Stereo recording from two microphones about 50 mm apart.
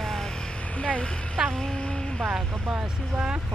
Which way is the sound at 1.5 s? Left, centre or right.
Centre.